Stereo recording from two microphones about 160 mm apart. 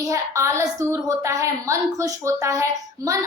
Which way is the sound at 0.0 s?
20° right (ahead or behind).